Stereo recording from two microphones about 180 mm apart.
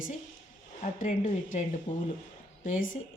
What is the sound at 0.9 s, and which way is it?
Speech, 45° left (ahead or behind).